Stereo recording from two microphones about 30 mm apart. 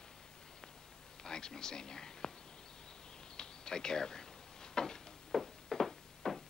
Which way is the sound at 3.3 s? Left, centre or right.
Left.